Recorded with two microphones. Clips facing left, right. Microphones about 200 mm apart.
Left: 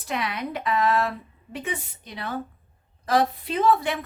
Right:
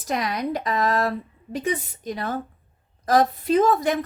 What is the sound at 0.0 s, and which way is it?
A woman's voice, 40° right (ahead or behind).